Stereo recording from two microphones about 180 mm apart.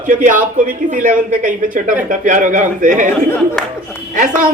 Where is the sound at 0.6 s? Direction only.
45° right (ahead or behind).